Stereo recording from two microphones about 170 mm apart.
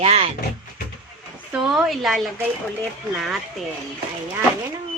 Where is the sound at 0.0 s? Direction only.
35° right (ahead or behind).